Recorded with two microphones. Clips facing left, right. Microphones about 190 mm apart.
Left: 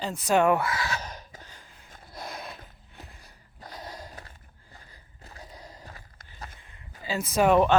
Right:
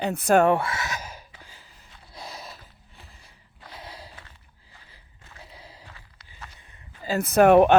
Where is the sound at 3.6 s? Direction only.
45° left (ahead or behind).